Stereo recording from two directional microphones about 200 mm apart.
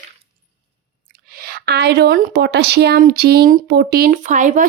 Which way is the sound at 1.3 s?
50° right (ahead or behind).